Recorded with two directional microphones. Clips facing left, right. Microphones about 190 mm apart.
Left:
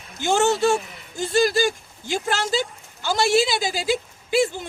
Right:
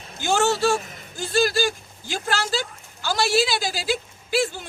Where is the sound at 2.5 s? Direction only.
20° left (ahead or behind).